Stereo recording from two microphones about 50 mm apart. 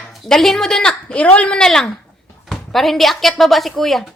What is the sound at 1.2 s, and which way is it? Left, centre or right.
Speech, left.